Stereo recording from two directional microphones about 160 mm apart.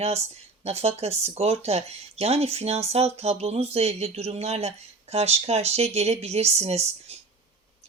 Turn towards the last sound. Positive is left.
turn(degrees=-40)  # may be behind; listen again after turning